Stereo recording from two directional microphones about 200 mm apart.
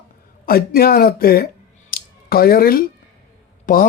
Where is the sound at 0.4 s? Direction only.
50° left (ahead or behind).